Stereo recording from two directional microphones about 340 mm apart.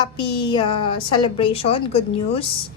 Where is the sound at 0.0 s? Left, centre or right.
Centre.